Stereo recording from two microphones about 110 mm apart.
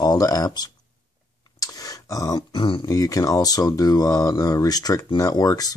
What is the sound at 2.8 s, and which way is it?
Speech, 30° left (ahead or behind).